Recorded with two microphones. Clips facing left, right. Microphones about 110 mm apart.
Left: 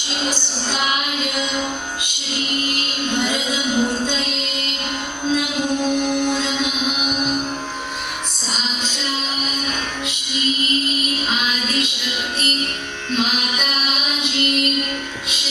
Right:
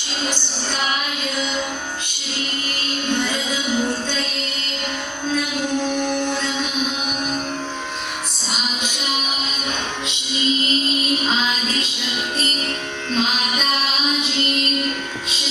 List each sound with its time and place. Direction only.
0.7 s child singing: 20° left (ahead or behind)
3.1 s music: 15° left (ahead or behind)
5.3 s music: 15° left (ahead or behind)